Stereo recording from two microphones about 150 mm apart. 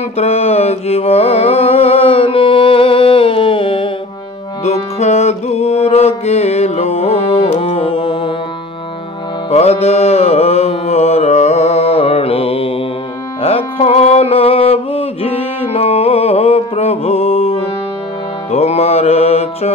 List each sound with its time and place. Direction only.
0.2 s mantra: 45° left (ahead or behind)
4.6 s music: 45° left (ahead or behind)
9.5 s music: 45° left (ahead or behind)